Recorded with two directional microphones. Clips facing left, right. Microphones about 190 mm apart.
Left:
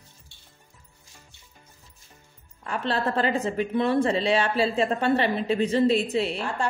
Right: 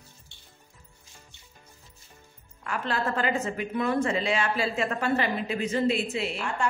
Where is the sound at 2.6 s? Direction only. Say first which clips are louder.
Left 3 dB; 30° left (ahead or behind).